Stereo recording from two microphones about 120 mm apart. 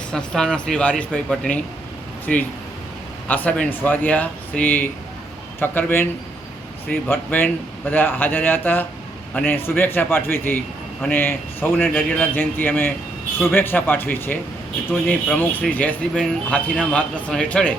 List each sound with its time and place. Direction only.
0.1 s speech: 5° left (ahead or behind)
3.2 s a man's voice: 15° left (ahead or behind)